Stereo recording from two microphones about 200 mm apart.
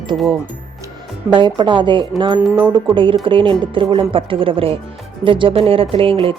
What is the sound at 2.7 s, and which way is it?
Speech, 25° right (ahead or behind).